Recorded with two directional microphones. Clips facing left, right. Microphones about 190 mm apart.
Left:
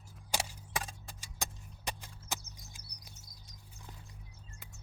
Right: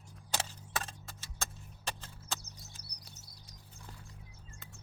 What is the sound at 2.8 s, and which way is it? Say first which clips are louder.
Chirp: right 1 dB; 70° right (ahead or behind).